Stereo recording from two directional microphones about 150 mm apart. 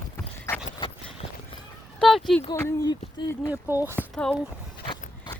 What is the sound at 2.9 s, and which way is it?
Speech, 30° left (ahead or behind).